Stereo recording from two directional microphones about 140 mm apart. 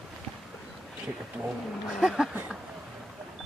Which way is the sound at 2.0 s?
5° right (ahead or behind).